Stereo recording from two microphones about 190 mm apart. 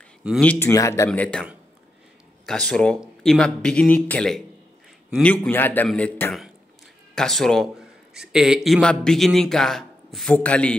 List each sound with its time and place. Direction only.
0.4 s a man's voice: 10° left (ahead or behind)
2.4 s a man's voice: 5° left (ahead or behind)